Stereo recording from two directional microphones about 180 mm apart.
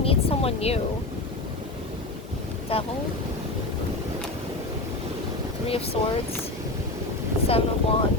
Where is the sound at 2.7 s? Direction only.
30° left (ahead or behind).